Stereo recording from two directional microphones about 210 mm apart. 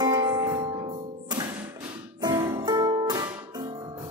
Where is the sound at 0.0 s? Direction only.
20° right (ahead or behind).